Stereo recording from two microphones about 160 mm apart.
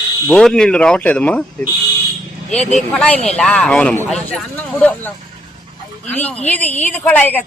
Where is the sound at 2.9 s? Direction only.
5° left (ahead or behind).